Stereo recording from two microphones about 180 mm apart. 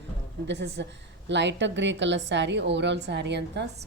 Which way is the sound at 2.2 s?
75° right (ahead or behind).